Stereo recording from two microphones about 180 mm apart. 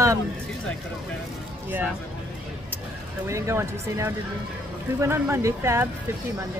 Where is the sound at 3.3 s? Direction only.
15° right (ahead or behind).